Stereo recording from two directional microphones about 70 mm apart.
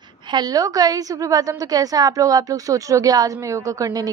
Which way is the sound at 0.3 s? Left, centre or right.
Right.